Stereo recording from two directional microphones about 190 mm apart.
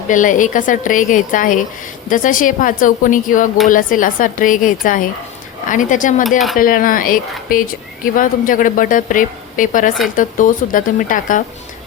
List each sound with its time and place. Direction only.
0.1 s speech: 45° left (ahead or behind)